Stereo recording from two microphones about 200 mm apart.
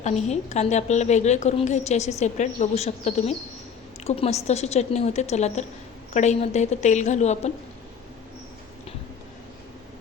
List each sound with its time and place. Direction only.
0.0 s a woman's voice: 35° left (ahead or behind)